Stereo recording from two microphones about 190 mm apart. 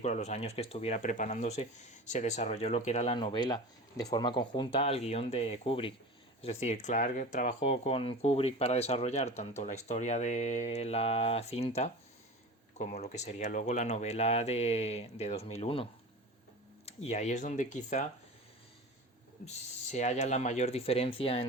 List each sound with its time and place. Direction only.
0.0 s speech: 40° left (ahead or behind)
3.2 s speech: 25° left (ahead or behind); by 18.0 s 40° left (ahead or behind)
19.5 s speech: 35° left (ahead or behind)